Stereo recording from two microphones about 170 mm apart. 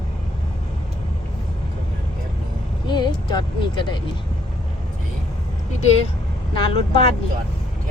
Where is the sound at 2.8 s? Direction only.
25° left (ahead or behind).